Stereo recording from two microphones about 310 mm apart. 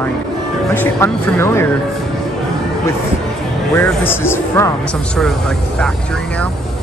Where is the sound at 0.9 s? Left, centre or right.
Centre.